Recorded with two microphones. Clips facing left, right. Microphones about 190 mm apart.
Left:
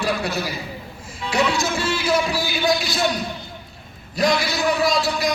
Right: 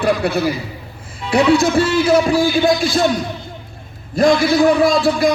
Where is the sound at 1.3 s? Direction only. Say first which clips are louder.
Right 9 dB; 60° right (ahead or behind).